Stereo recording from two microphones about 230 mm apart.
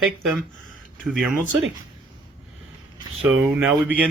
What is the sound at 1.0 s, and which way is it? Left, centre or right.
Speech, centre.